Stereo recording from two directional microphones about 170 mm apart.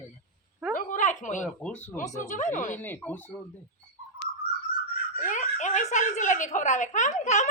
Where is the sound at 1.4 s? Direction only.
5° left (ahead or behind).